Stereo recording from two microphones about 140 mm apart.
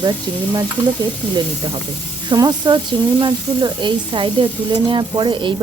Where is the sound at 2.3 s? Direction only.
30° right (ahead or behind).